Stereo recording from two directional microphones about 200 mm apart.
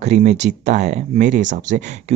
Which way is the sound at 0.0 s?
35° right (ahead or behind).